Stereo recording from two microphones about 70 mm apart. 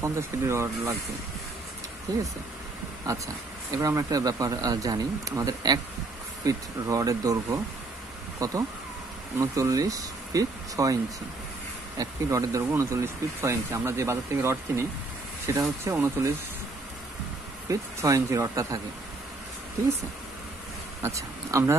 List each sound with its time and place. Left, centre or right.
0.0 s speech: right
2.1 s speech: right
12.0 s speech: right
17.6 s speech: right
21.0 s speech: right